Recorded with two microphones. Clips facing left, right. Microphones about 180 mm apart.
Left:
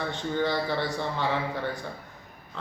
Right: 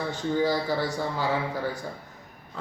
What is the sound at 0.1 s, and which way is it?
A man's voice, 5° right (ahead or behind).